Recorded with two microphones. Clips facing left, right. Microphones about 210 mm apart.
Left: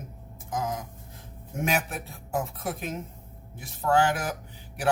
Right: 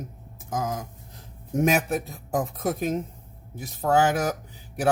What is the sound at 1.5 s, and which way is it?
Speech, 40° right (ahead or behind).